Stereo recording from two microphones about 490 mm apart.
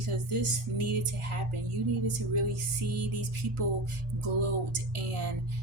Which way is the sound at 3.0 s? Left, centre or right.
Right.